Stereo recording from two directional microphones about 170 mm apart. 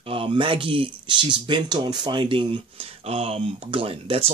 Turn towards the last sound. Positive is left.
turn(degrees=-35)  # may be behind; listen again after turning